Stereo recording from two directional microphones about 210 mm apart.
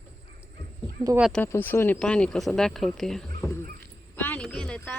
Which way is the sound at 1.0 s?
10° right (ahead or behind).